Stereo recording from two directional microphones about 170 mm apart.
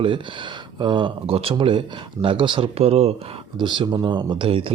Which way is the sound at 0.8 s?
30° right (ahead or behind).